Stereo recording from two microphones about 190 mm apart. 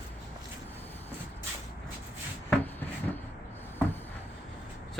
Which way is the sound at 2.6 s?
10° left (ahead or behind).